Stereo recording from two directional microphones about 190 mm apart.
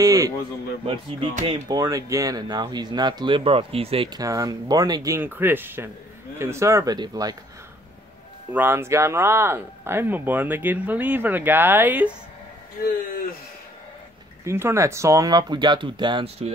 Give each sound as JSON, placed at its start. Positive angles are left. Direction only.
{"t": 0.0, "sound": "a sound", "side_deg": -20}
{"t": 1.5, "sound": "speech", "side_deg": -20}
{"t": 8.5, "sound": "speech", "side_deg": -10}
{"t": 14.4, "sound": "speech", "side_deg": -15}